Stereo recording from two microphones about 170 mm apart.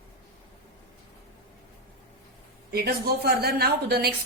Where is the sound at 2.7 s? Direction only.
70° right (ahead or behind).